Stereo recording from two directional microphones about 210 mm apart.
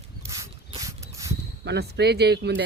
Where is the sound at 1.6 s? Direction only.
55° right (ahead or behind).